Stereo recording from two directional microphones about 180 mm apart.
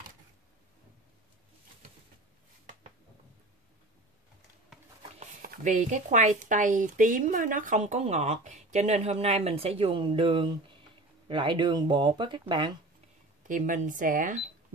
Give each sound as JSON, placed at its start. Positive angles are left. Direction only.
{"t": 5.2, "sound": "speech", "side_deg": -45}
{"t": 13.5, "sound": "speech", "side_deg": -45}